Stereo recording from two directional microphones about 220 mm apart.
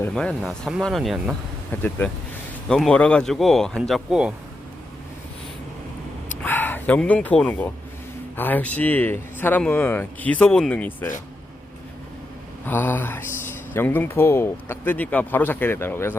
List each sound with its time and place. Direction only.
0.0 s speech: 5° left (ahead or behind)
6.4 s speech: 10° left (ahead or behind)
12.6 s speech: 10° left (ahead or behind)